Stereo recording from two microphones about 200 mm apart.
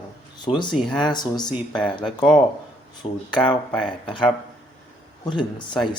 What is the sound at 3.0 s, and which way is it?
Speech, 25° left (ahead or behind).